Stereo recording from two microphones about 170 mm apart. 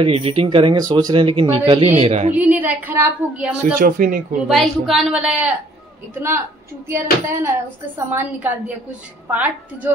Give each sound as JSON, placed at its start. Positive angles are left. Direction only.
{"t": 0.0, "sound": "speech", "side_deg": -35}
{"t": 2.3, "sound": "a woman's voice", "side_deg": -10}
{"t": 3.8, "sound": "speech", "side_deg": -55}
{"t": 4.5, "sound": "a woman's voice", "side_deg": 0}